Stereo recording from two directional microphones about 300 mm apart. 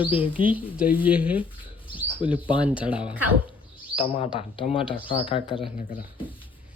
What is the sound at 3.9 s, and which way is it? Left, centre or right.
Speech, centre.